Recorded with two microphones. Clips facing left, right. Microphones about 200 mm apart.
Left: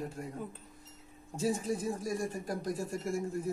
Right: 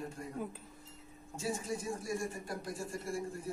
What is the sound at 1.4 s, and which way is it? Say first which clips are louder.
Speech: left 6 dB; 35° left (ahead or behind).